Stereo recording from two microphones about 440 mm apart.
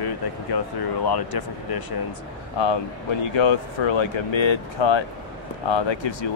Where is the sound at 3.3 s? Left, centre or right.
Left.